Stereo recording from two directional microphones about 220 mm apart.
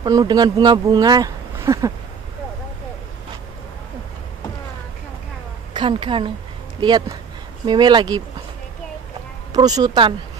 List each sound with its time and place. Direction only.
0.0 s speech: 20° right (ahead or behind)
5.7 s a woman's voice: 20° right (ahead or behind)
9.5 s speech: 15° right (ahead or behind)